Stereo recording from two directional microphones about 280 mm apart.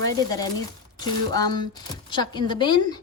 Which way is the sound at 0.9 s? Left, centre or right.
Centre.